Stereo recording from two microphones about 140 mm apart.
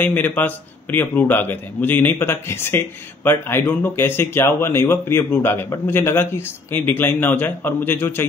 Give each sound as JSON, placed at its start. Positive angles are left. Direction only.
{"t": 0.0, "sound": "speech", "side_deg": 15}